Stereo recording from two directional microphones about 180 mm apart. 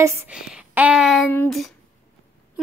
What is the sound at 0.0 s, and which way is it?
Speech, 15° right (ahead or behind).